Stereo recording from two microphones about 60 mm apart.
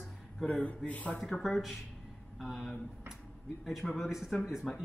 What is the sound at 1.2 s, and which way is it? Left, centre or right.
Speech, centre.